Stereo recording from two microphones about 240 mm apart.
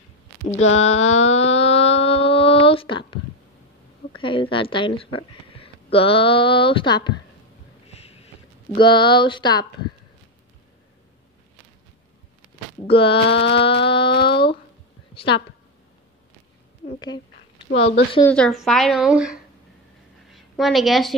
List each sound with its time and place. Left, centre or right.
0.7 s a sound: left
4.1 s a woman's voice: left
8.0 s sniff: left
8.7 s speech: centre
12.9 s speech: left
13.3 s a sound: left
13.8 s speech: left
14.1 s a sound: left
15.1 s a woman's voice: left
17.6 s a woman's voice: left
18.3 s a woman's voice: centre
20.2 s a sound: centre